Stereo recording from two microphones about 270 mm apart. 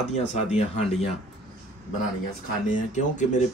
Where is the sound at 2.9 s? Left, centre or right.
Left.